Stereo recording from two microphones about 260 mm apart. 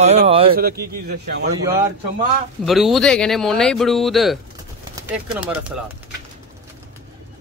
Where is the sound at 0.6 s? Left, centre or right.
Right.